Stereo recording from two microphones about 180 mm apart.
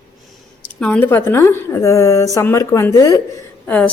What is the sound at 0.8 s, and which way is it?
A woman's voice, 10° left (ahead or behind).